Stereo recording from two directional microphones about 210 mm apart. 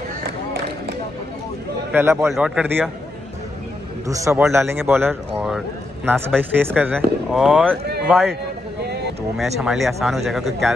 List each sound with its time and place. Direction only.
2.0 s speech: 10° right (ahead or behind)
4.1 s speech: 15° right (ahead or behind)
7.8 s a sound: 50° right (ahead or behind)
9.4 s speech: centre (ahead or behind)